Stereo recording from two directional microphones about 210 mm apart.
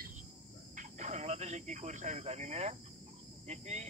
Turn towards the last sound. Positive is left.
turn(degrees=-30)  # may be behind; listen again after turning